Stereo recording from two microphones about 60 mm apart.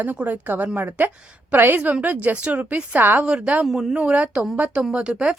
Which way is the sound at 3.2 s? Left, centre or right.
Centre.